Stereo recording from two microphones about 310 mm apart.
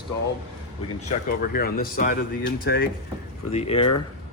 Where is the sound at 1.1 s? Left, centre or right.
Left.